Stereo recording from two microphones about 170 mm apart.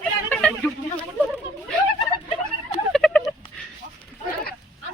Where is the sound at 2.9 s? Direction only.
5° left (ahead or behind).